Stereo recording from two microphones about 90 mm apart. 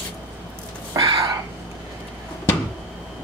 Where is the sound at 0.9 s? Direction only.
45° right (ahead or behind).